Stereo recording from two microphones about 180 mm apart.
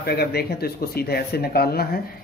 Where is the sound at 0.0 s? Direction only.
60° left (ahead or behind).